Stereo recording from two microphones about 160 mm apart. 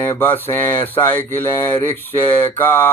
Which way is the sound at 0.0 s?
15° left (ahead or behind).